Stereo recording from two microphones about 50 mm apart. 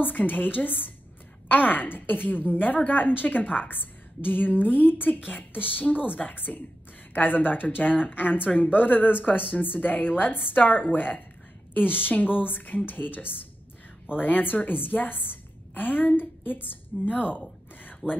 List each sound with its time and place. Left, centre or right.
0.0 s a woman's voice: left